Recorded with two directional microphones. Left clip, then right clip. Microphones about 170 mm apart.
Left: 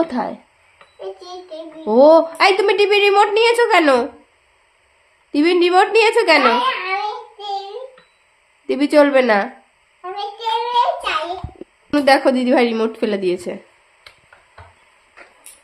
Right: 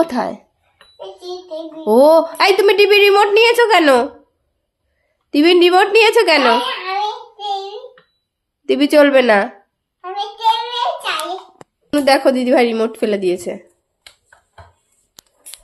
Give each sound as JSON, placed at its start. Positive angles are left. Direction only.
{"t": 0.0, "sound": "a woman's voice", "side_deg": -15}
{"t": 1.8, "sound": "a woman's voice", "side_deg": -15}
{"t": 5.3, "sound": "a woman's voice", "side_deg": -15}
{"t": 8.6, "sound": "a woman's voice", "side_deg": -15}
{"t": 10.0, "sound": "a sound", "side_deg": 10}
{"t": 11.9, "sound": "a woman's voice", "side_deg": -5}